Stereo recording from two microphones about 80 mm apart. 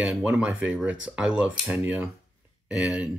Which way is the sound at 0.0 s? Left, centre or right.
Centre.